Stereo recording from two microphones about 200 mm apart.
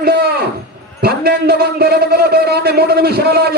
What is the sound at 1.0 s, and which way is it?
A man's voice, 50° right (ahead or behind).